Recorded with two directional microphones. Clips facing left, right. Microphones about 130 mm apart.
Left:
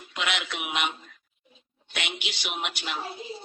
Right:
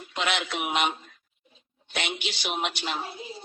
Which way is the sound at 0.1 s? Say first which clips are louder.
Right 3 dB; 35° right (ahead or behind).